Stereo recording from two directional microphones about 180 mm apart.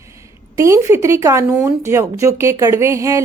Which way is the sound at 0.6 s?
15° right (ahead or behind).